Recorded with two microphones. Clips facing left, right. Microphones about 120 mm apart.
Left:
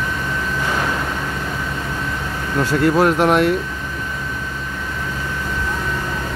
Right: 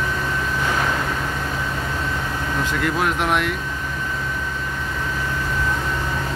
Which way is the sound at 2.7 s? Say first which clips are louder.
Left 9 dB; 40° left (ahead or behind).